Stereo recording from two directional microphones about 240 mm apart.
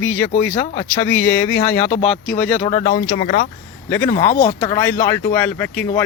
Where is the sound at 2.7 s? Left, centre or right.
Left.